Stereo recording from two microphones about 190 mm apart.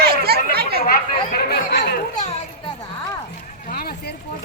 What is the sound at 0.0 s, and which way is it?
Chatter, 55° right (ahead or behind).